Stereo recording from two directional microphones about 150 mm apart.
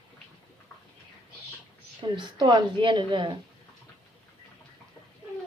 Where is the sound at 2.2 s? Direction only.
30° right (ahead or behind).